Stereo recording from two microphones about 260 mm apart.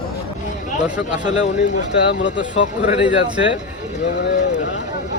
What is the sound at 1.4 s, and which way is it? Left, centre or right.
Speech, left.